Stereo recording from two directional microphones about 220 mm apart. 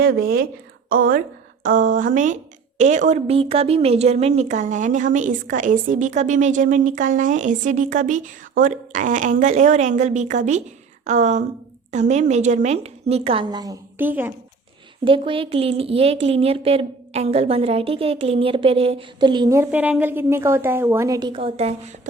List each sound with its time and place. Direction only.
0.0 s a woman's voice: 45° right (ahead or behind); by 14.3 s 10° right (ahead or behind)
15.0 s a woman's voice: 25° right (ahead or behind)